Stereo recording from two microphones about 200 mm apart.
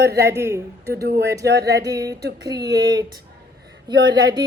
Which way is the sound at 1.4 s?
55° right (ahead or behind).